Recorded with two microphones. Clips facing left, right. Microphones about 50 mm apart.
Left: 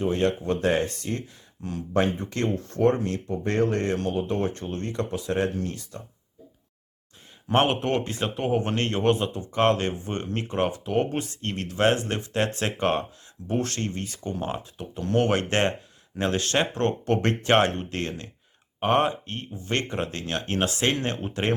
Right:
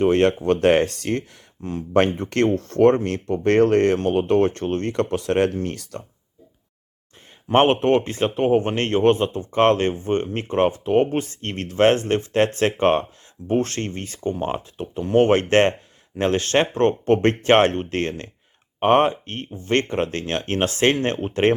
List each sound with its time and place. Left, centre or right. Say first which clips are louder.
0.0 s speech: right 7 dB; right
1.6 s speech: right 4 dB; right
2.1 s speech: right 7 dB; right
7.5 s speech: right 6 dB; right